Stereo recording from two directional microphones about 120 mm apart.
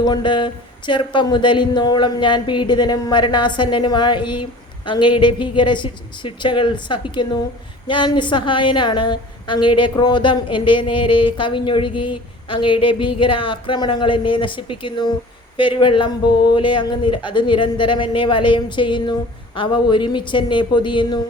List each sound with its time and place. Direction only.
0.0 s speech: 40° left (ahead or behind)